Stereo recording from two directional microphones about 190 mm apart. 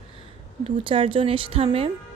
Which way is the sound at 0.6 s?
25° right (ahead or behind).